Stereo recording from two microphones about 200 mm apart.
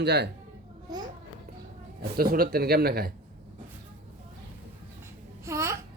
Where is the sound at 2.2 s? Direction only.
50° right (ahead or behind).